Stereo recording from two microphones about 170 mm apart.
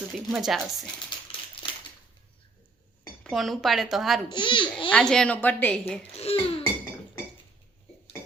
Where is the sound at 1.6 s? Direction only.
30° left (ahead or behind).